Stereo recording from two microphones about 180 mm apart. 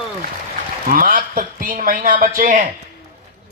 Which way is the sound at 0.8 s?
50° right (ahead or behind).